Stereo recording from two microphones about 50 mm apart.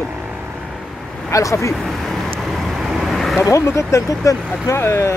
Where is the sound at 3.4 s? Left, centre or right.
Left.